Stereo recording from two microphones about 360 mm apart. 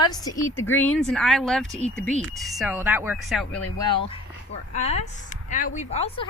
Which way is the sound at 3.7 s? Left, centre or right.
Centre.